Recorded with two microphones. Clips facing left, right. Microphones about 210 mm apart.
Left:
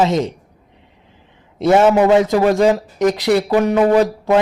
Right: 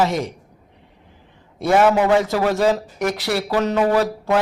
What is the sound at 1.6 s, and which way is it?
Speech, 25° left (ahead or behind).